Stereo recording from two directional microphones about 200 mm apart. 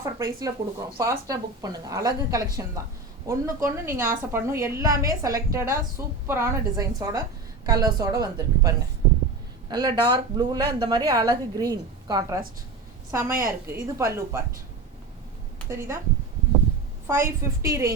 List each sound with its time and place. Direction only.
0.0 s a woman's voice: 15° right (ahead or behind)
17.1 s speech: 15° right (ahead or behind)